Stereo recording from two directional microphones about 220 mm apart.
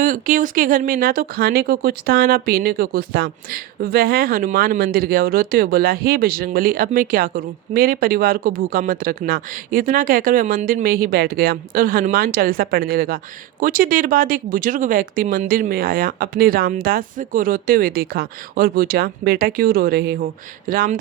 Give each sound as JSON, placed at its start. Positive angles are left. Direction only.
{"t": 0.0, "sound": "speech", "side_deg": -40}